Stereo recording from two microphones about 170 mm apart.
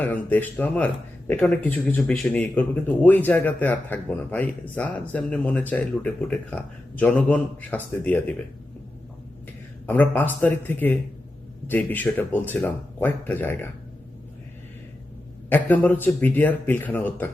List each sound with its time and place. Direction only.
0.0 s speech: 10° left (ahead or behind)
9.8 s speech: 10° left (ahead or behind)
15.4 s speech: 10° left (ahead or behind)